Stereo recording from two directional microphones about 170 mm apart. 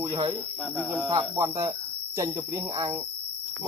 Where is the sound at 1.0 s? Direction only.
20° right (ahead or behind).